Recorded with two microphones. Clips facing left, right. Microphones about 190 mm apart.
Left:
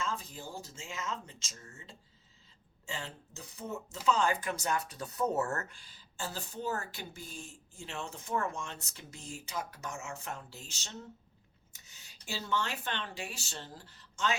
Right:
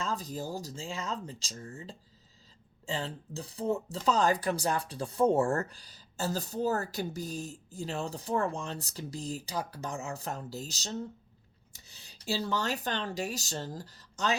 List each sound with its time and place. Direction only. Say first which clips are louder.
0.0 s speech: right 4 dB; 35° right (ahead or behind)